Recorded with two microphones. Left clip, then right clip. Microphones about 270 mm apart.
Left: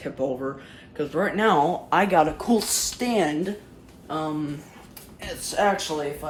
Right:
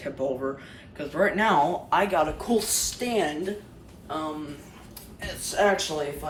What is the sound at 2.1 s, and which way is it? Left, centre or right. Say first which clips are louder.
A woman's voice: left 4 dB; left.